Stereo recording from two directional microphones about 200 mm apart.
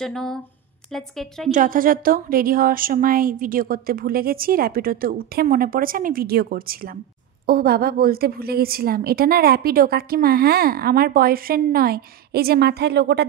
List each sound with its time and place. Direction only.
0.0 s speech: 5° left (ahead or behind)
1.5 s a woman's voice: 40° right (ahead or behind)